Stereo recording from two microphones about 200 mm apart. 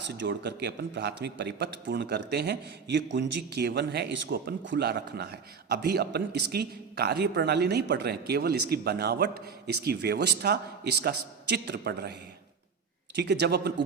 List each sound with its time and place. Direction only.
0.2 s a man's voice: 60° right (ahead or behind)
13.1 s a man's voice: 55° right (ahead or behind)